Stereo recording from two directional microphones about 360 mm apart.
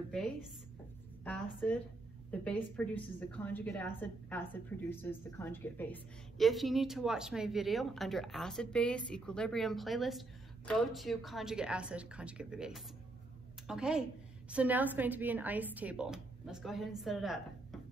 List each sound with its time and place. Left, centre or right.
1.2 s a woman's voice: centre